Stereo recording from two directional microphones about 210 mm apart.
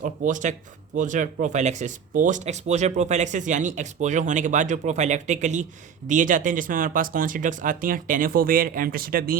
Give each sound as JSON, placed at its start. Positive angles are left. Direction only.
{"t": 0.0, "sound": "speech", "side_deg": -35}